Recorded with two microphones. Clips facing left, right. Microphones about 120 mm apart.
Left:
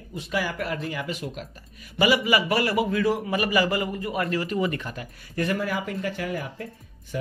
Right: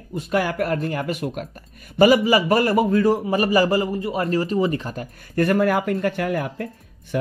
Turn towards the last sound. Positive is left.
turn(degrees=-60)  # may be behind; listen again after turning